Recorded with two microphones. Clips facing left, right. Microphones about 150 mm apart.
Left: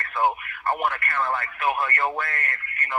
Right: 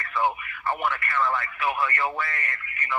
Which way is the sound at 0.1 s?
50° left (ahead or behind).